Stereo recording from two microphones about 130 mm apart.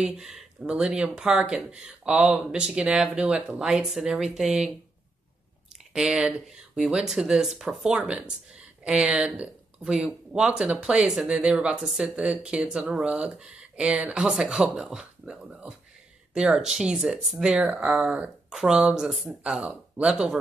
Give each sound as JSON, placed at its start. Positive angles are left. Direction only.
{"t": 0.0, "sound": "speech", "side_deg": -5}
{"t": 5.9, "sound": "speech", "side_deg": -5}